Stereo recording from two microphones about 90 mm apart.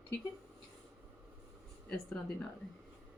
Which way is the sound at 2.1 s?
15° left (ahead or behind).